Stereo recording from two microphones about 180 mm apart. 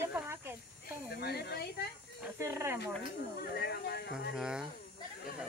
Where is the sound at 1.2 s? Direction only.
65° left (ahead or behind).